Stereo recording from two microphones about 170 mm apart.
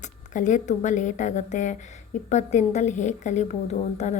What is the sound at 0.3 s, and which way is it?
A woman's voice, 45° left (ahead or behind).